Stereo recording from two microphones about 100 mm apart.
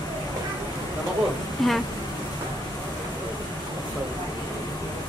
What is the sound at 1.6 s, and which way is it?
Speech, centre (ahead or behind).